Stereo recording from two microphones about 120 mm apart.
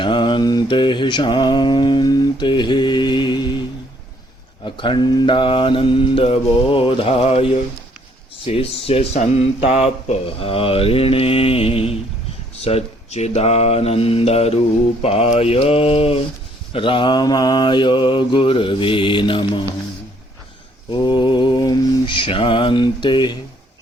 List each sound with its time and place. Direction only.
0.0 s mantra: 40° left (ahead or behind)
4.6 s speech: 40° left (ahead or behind)
20.9 s mantra: 40° left (ahead or behind)